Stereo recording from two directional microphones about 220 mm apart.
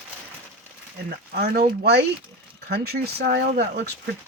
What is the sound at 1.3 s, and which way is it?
Speech, 45° right (ahead or behind).